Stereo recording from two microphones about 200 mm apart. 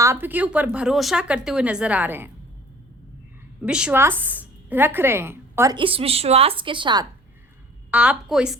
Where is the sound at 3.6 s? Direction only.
5° right (ahead or behind); by 7.0 s 25° right (ahead or behind).